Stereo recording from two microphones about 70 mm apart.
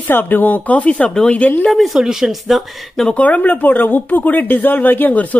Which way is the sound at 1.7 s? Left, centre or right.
Centre.